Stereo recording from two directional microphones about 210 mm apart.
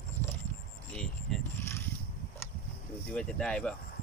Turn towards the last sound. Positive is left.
turn(degrees=5)  # may be behind; listen again after turning